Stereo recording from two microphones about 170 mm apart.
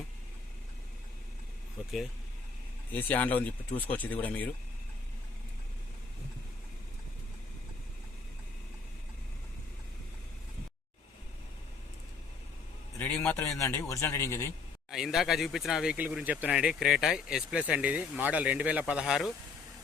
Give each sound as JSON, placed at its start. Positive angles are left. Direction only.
{"t": 1.8, "sound": "vehicle", "side_deg": -5}
{"t": 2.9, "sound": "speech", "side_deg": 10}
{"t": 13.0, "sound": "speech", "side_deg": 10}
{"t": 14.8, "sound": "speech", "side_deg": 0}